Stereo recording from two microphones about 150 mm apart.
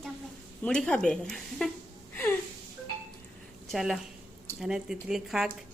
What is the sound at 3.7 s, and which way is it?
Speech, centre (ahead or behind).